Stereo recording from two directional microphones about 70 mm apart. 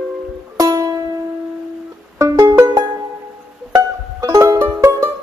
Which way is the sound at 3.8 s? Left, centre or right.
Right.